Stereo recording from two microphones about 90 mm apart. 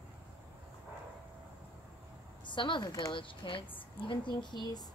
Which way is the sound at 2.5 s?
60° left (ahead or behind).